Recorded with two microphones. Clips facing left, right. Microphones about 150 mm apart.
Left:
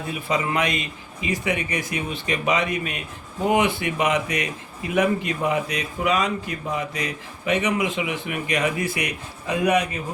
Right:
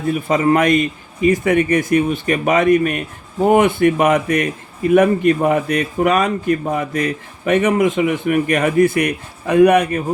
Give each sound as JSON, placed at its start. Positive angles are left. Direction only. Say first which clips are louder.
{"t": 0.1, "sound": "a man's voice", "louder": "right 10 dB", "side_deg": -50}